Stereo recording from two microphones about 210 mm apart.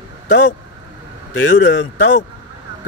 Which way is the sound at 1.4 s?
65° left (ahead or behind).